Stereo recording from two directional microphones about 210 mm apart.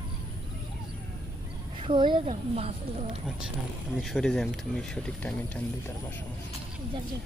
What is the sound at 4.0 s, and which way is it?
Speech, centre (ahead or behind).